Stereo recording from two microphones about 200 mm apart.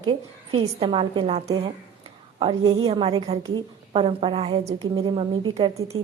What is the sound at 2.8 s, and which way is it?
A woman's voice, 25° right (ahead or behind).